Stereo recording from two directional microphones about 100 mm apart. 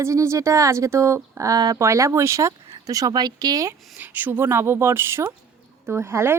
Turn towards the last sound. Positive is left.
turn(degrees=-25)  # may be behind; listen again after turning